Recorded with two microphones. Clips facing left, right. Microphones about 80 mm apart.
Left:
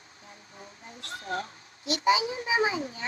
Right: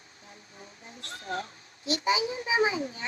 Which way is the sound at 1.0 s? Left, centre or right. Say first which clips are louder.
Left 1 dB; left.